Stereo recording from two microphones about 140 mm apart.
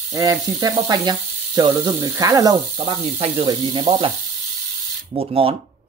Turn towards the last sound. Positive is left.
turn(degrees=-40)  # may be behind; listen again after turning